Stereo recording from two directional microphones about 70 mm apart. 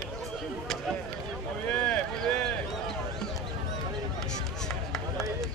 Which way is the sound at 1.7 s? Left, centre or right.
Centre.